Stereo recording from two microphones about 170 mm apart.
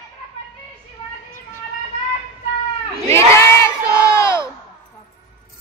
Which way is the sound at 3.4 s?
15° left (ahead or behind).